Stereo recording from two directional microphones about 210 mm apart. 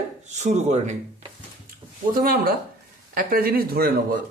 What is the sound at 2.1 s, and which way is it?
A man's voice, 45° right (ahead or behind).